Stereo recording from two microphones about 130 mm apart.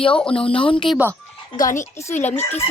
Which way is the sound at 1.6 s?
85° left.